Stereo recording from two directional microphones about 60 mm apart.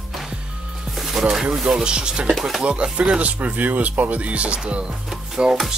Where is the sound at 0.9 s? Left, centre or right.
Centre.